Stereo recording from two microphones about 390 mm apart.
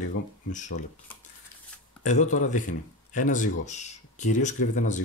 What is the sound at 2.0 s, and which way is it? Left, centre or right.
Speech, centre.